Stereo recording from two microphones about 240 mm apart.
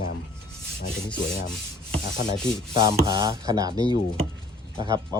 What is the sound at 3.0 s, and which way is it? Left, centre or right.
Speech, centre.